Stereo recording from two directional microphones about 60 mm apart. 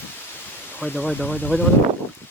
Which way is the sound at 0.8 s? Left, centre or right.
Left.